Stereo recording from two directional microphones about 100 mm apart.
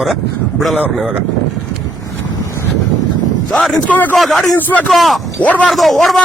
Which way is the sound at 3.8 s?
15° left (ahead or behind).